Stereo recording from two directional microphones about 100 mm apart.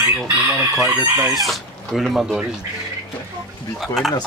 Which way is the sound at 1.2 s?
Centre (ahead or behind).